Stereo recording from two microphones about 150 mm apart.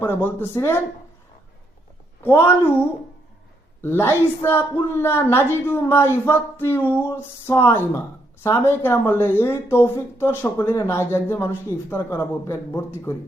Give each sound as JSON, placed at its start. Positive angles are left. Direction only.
{"t": 0.0, "sound": "speech", "side_deg": 15}
{"t": 2.2, "sound": "speech", "side_deg": 15}
{"t": 3.8, "sound": "speech", "side_deg": 15}